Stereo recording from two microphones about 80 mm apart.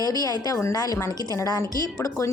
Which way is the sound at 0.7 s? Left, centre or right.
Left.